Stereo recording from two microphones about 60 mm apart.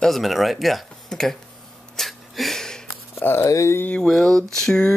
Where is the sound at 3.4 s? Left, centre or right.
Left.